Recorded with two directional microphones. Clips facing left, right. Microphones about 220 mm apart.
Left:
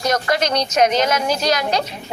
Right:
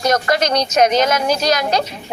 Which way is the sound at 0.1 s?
40° right (ahead or behind).